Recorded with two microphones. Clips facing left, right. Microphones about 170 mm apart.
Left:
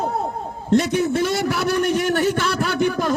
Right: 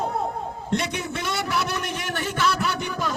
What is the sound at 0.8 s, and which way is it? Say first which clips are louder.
Speech: left 10 dB; 50° left (ahead or behind).